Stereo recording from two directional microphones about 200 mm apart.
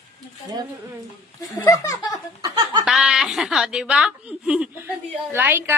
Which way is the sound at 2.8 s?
5° right (ahead or behind).